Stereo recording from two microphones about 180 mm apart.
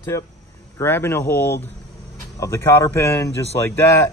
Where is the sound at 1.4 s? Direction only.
65° left (ahead or behind).